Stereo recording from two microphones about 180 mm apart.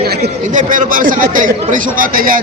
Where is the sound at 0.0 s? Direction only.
60° right (ahead or behind).